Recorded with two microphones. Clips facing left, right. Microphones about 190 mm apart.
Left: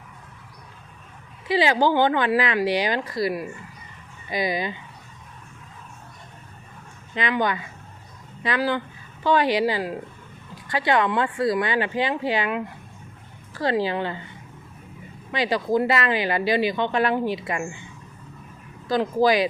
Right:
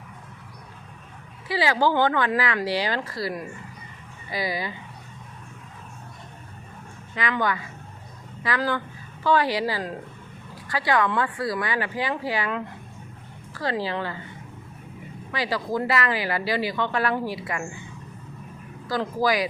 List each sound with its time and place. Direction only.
1.5 s speech: 20° left (ahead or behind)
7.1 s speech: 20° left (ahead or behind)
15.3 s speech: 20° left (ahead or behind)
18.9 s speech: 25° left (ahead or behind)